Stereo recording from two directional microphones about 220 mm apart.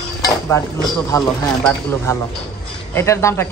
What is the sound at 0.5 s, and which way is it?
Speech, 15° left (ahead or behind).